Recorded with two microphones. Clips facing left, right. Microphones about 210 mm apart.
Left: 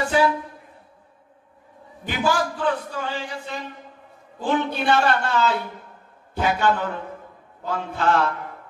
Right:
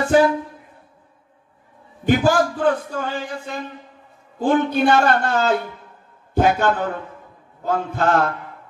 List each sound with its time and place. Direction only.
0.1 s a man's voice: 45° right (ahead or behind)
2.0 s a man's voice: 45° right (ahead or behind)